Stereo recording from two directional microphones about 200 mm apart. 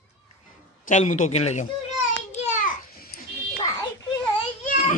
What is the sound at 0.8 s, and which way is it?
Speech, 40° left (ahead or behind).